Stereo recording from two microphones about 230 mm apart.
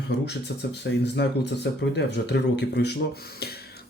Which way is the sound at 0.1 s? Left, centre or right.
Left.